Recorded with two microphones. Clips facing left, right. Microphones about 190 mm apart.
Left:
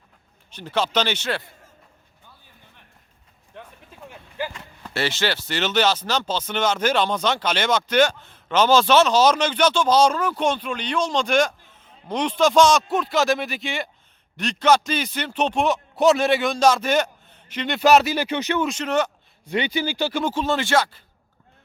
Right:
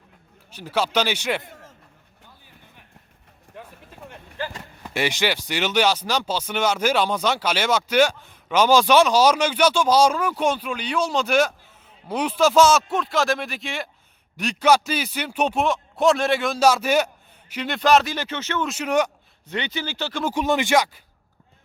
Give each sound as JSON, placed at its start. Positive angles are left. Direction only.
{"t": 0.5, "sound": "speech", "side_deg": -10}
{"t": 3.5, "sound": "a sound", "side_deg": -5}
{"t": 4.4, "sound": "a sound", "side_deg": 15}
{"t": 4.8, "sound": "speech", "side_deg": -15}
{"t": 15.6, "sound": "a man's voice", "side_deg": 0}
{"t": 17.7, "sound": "speech", "side_deg": 5}
{"t": 18.6, "sound": "speech", "side_deg": -5}
{"t": 19.5, "sound": "speech", "side_deg": 10}
{"t": 20.2, "sound": "speech", "side_deg": -15}